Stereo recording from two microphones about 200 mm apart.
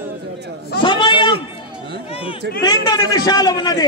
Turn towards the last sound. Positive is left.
turn(degrees=20)  # may be behind; listen again after turning